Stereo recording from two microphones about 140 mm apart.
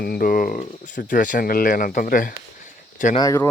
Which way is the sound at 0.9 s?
70° left (ahead or behind).